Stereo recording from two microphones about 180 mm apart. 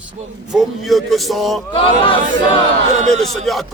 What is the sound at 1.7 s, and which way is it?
Speech, 30° left (ahead or behind).